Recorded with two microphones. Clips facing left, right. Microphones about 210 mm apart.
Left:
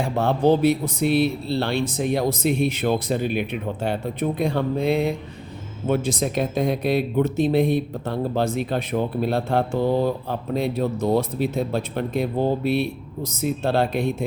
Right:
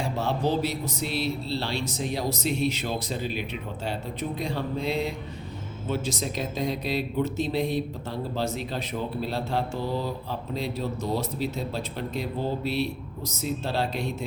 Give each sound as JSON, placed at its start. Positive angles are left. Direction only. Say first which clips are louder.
{"t": 0.0, "sound": "speech", "louder": "left 7 dB", "side_deg": 55}